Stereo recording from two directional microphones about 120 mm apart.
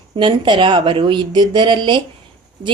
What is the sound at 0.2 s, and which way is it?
Speech, 40° right (ahead or behind).